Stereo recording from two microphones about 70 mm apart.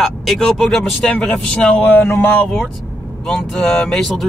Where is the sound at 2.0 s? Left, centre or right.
Left.